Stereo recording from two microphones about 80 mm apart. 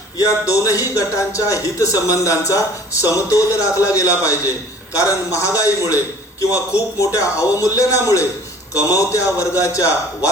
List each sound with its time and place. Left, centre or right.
0.2 s a man's voice: left